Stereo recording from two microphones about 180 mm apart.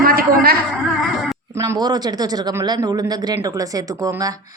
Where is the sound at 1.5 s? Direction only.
15° right (ahead or behind).